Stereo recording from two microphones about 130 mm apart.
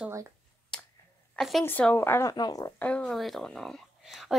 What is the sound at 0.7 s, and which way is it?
Finger snapping, 5° left (ahead or behind).